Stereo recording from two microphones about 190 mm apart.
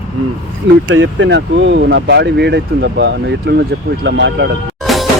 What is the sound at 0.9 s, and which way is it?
Speech, 75° right (ahead or behind).